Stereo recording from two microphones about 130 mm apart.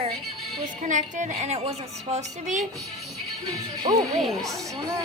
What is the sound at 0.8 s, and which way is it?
A woman's voice, 70° right (ahead or behind).